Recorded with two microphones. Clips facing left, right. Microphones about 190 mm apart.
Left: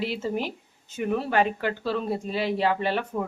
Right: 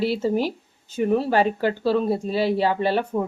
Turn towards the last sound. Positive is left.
turn(degrees=-35)  # may be behind; listen again after turning